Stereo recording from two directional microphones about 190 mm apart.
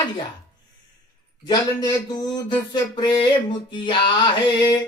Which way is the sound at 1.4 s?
20° left (ahead or behind).